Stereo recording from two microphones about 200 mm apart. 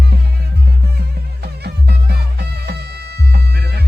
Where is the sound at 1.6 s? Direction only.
55° right (ahead or behind).